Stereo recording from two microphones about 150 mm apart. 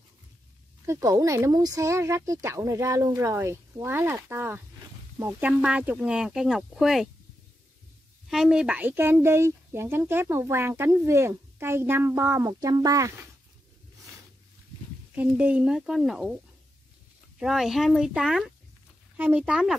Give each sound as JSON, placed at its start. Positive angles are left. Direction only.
{"t": 0.8, "sound": "speech", "side_deg": -20}
{"t": 8.3, "sound": "speech", "side_deg": -5}
{"t": 15.1, "sound": "speech", "side_deg": -10}
{"t": 17.4, "sound": "speech", "side_deg": 0}